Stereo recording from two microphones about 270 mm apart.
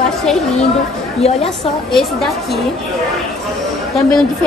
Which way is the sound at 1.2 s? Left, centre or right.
Left.